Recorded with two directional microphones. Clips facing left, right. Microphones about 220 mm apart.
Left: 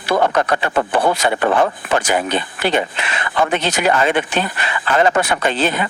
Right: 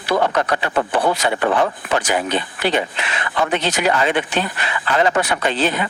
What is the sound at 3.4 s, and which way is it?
Speech, 50° left (ahead or behind).